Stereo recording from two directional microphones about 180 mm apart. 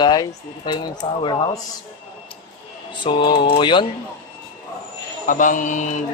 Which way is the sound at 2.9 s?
25° left (ahead or behind).